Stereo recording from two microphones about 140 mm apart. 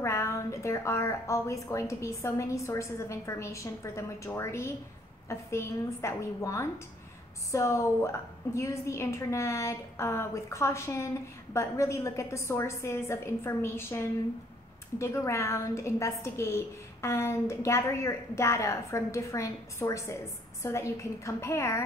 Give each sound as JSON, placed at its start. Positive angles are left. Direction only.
{"t": 0.0, "sound": "a woman's voice", "side_deg": 20}